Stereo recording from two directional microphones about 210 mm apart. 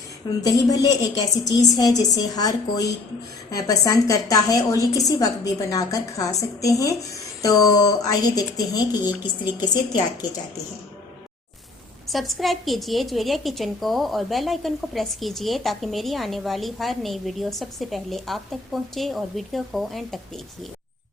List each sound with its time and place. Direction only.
0.4 s a woman's voice: 15° left (ahead or behind)
12.0 s a woman's voice: centre (ahead or behind)